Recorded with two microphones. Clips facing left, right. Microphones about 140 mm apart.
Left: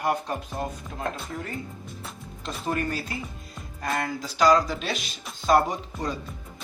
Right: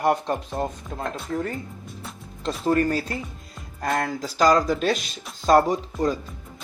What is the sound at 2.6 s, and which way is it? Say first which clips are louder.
Speech: right 7 dB; 40° right (ahead or behind).